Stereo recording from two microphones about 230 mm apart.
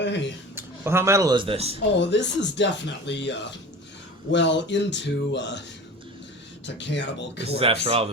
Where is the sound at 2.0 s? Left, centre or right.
Left.